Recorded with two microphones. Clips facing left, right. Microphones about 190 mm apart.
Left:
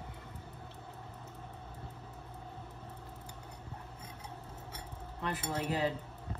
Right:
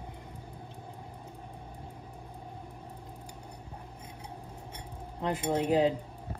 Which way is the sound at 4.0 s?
15° right (ahead or behind).